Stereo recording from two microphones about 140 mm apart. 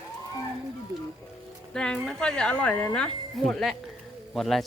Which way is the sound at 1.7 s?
5° left (ahead or behind).